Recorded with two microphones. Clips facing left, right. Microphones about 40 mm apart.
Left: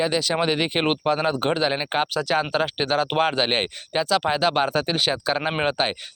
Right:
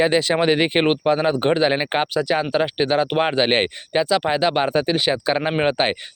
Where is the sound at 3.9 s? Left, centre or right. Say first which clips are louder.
Right 2 dB; centre.